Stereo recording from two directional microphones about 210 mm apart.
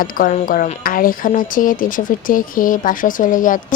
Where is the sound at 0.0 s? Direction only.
40° left (ahead or behind).